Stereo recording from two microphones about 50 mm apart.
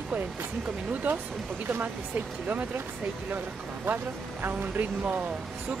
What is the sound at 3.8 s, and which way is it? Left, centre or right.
Speech, right.